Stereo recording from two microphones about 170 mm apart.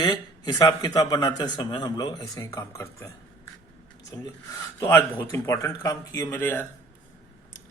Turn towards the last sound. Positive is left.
turn(degrees=10)  # may be behind; listen again after turning